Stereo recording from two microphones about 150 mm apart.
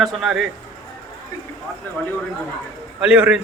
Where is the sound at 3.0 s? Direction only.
10° right (ahead or behind).